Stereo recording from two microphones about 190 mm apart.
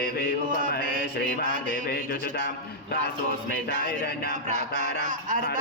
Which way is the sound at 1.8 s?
60° left (ahead or behind).